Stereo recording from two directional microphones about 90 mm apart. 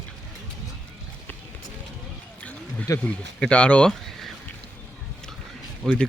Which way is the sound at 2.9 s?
35° left (ahead or behind).